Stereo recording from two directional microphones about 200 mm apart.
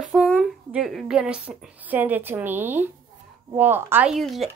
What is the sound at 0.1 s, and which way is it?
Speech, centre (ahead or behind).